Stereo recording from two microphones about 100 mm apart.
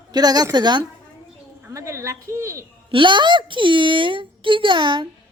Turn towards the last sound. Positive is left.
turn(degrees=-50)  # may be behind; listen again after turning